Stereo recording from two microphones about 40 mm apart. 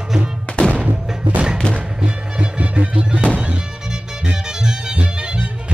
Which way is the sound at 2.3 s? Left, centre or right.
Right.